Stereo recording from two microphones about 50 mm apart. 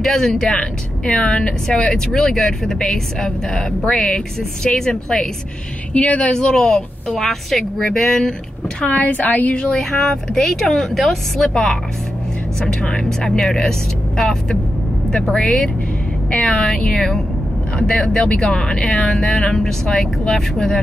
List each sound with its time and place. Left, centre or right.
0.0 s a woman's voice: centre
5.9 s speech: left
6.3 s a woman's voice: centre
8.8 s a woman's voice: left
9.8 s speech: centre
11.4 s a woman's voice: centre